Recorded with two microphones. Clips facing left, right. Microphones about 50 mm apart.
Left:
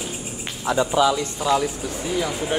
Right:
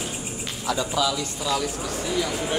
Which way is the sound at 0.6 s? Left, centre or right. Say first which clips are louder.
Left 6 dB; left.